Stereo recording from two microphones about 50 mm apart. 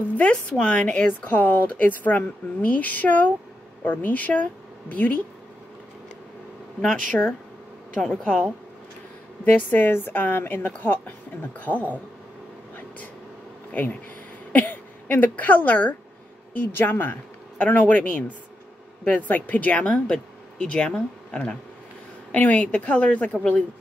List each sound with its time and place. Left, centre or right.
0.1 s speech: left
6.8 s speech: left
9.4 s speech: left
14.5 s a woman's voice: left
17.6 s speech: left
19.0 s speech: left